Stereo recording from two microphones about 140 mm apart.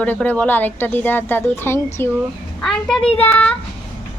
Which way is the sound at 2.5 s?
5° left (ahead or behind).